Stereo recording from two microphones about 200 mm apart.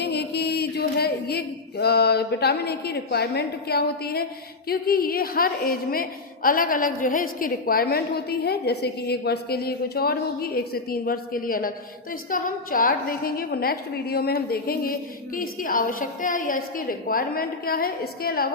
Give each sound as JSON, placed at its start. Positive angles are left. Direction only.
{"t": 0.0, "sound": "a woman's voice", "side_deg": 55}